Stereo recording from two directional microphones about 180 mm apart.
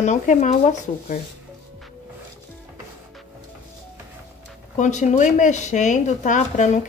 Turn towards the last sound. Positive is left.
turn(degrees=40)  # may be behind; listen again after turning